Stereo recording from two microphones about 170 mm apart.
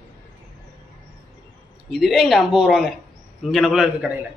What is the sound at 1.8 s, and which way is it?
A man's voice, centre (ahead or behind).